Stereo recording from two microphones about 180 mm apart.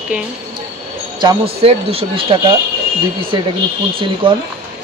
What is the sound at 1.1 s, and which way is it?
Speech, 30° right (ahead or behind).